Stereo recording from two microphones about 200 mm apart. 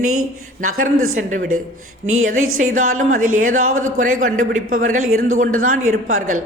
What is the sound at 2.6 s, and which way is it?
Speech, 40° right (ahead or behind).